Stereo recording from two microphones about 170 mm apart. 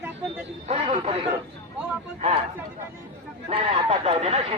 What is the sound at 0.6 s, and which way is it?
Speech, 40° right (ahead or behind).